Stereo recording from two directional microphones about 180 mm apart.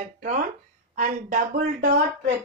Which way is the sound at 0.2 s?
50° right (ahead or behind).